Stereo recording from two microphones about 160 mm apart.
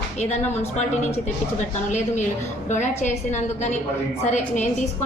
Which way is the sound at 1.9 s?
50° left (ahead or behind).